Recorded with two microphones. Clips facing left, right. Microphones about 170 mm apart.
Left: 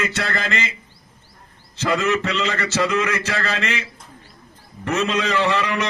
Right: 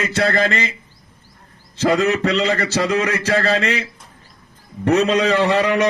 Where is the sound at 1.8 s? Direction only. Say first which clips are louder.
Right 4 dB; 40° right (ahead or behind).